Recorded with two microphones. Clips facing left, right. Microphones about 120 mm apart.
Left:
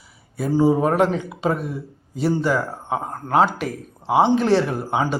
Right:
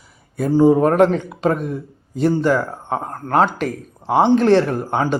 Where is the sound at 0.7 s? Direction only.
5° left (ahead or behind).